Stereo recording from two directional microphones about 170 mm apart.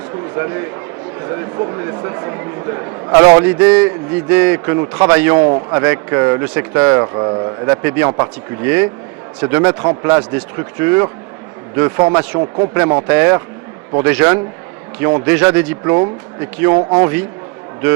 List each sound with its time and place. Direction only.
0.3 s speech: 20° right (ahead or behind)